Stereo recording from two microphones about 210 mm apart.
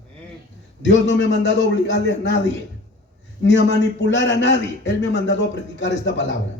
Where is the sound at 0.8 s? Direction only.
60° left (ahead or behind).